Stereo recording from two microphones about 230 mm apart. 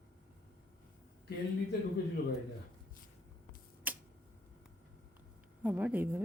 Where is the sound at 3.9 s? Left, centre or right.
Centre.